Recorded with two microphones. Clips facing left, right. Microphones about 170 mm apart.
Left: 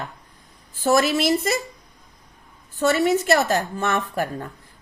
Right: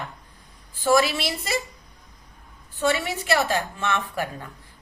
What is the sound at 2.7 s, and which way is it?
A woman's voice, 40° left (ahead or behind).